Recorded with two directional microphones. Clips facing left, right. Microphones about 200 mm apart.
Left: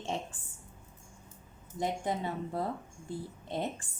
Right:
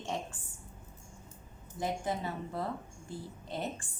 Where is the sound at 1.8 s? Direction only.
20° left (ahead or behind).